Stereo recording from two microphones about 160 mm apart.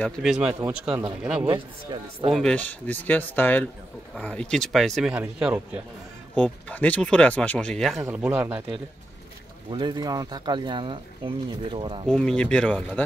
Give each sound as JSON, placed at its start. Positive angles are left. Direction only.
{"t": 0.2, "sound": "speech", "side_deg": -5}
{"t": 1.5, "sound": "speech", "side_deg": -30}
{"t": 2.3, "sound": "speech", "side_deg": 5}
{"t": 6.3, "sound": "speech", "side_deg": 10}
{"t": 8.0, "sound": "speech", "side_deg": -10}
{"t": 9.7, "sound": "speech", "side_deg": -30}
{"t": 12.1, "sound": "speech", "side_deg": 5}